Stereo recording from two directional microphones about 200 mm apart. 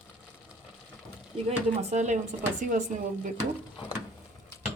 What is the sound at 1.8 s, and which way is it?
Speech, 35° right (ahead or behind).